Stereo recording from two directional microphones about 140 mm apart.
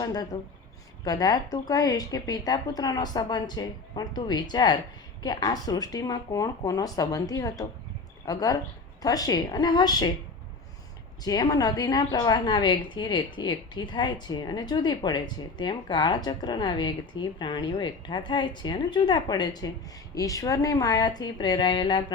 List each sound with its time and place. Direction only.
0.0 s a woman's voice: 30° left (ahead or behind)
11.2 s a woman's voice: 30° left (ahead or behind)